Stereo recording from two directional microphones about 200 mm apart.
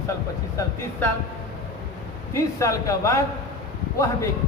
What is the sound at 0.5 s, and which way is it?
Speech, 10° left (ahead or behind).